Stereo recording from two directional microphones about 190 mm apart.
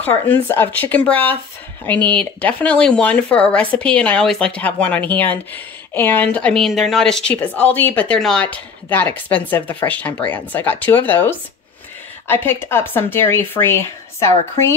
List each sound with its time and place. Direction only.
0.0 s speech: 10° left (ahead or behind)